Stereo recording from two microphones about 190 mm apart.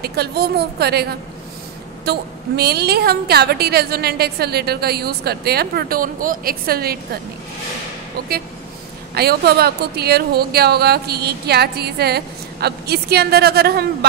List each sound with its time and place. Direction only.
0.0 s a woman's voice: 55° right (ahead or behind)
2.0 s a woman's voice: 55° right (ahead or behind)
9.1 s a woman's voice: 55° right (ahead or behind)